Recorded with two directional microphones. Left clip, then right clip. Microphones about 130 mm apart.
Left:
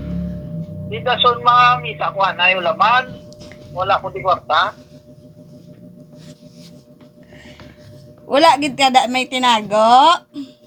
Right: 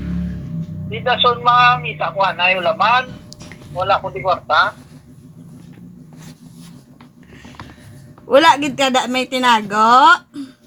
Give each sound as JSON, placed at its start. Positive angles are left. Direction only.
{"t": 0.9, "sound": "a man's voice", "side_deg": 10}
{"t": 8.4, "sound": "speech", "side_deg": 40}